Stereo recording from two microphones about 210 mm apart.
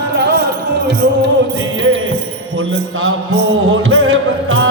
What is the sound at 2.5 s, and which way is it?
Mantra, 75° right (ahead or behind).